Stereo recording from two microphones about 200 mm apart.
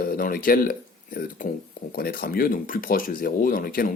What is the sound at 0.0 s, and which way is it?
Speech, 45° left (ahead or behind).